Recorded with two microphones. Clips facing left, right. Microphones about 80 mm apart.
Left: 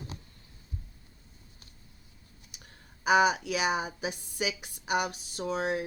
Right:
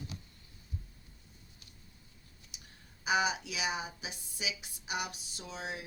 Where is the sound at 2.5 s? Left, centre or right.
Left.